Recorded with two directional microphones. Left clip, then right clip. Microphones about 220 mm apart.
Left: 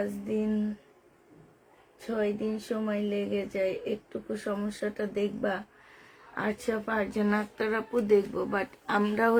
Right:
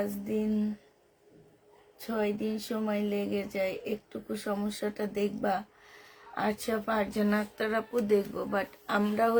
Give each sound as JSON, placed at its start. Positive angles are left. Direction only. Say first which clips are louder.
{"t": 0.0, "sound": "speech", "louder": "left 1 dB", "side_deg": 0}
{"t": 2.0, "sound": "speech", "louder": "left 1 dB", "side_deg": 0}